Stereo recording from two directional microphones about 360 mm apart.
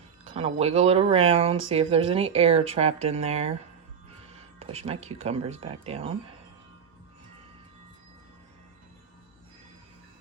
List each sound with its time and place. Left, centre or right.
0.3 s speech: centre
4.6 s speech: centre